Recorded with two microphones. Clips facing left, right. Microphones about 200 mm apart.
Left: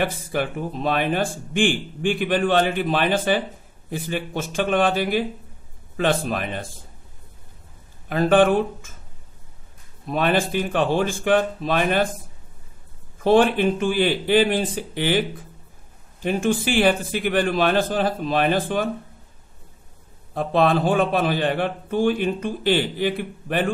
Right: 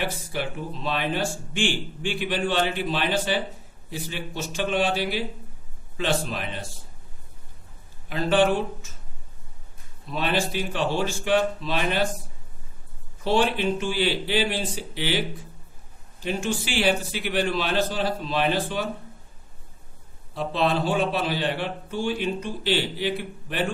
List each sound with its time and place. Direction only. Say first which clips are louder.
0.0 s a man's voice: left 5 dB; 50° left (ahead or behind)
8.1 s a man's voice: left 5 dB; 50° left (ahead or behind)
10.0 s a man's voice: left 5 dB; 50° left (ahead or behind)
13.2 s a man's voice: left 6 dB; 50° left (ahead or behind)
20.3 s a man's voice: left 5 dB; 50° left (ahead or behind)